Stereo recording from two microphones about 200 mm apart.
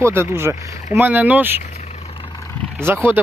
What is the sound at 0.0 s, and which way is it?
Speech, 10° right (ahead or behind).